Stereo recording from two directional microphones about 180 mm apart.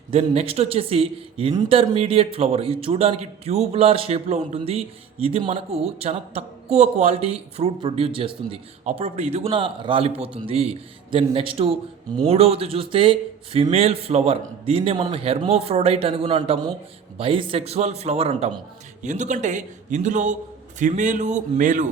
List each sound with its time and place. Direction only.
0.1 s a man's voice: 35° right (ahead or behind)